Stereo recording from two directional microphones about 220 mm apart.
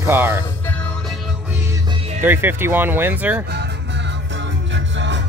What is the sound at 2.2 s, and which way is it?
Speech, 10° right (ahead or behind).